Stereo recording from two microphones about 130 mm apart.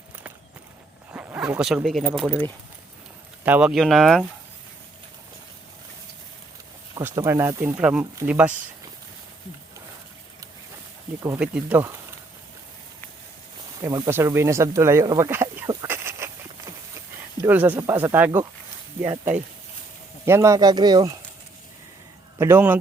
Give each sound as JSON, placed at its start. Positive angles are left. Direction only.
{"t": 1.1, "sound": "speech", "side_deg": -15}
{"t": 3.4, "sound": "speech", "side_deg": -15}
{"t": 3.7, "sound": "speech", "side_deg": 0}
{"t": 7.2, "sound": "speech", "side_deg": -20}
{"t": 7.8, "sound": "speech", "side_deg": -10}
{"t": 11.3, "sound": "speech", "side_deg": -10}
{"t": 13.8, "sound": "speech", "side_deg": -30}
{"t": 14.1, "sound": "speech", "side_deg": -20}
{"t": 15.3, "sound": "a sound", "side_deg": -15}
{"t": 15.6, "sound": "a sound", "side_deg": -30}
{"t": 17.5, "sound": "speech", "side_deg": -10}
{"t": 17.7, "sound": "speech", "side_deg": -20}
{"t": 22.4, "sound": "speech", "side_deg": -20}